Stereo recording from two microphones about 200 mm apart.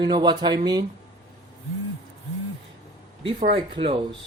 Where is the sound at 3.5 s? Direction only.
25° right (ahead or behind).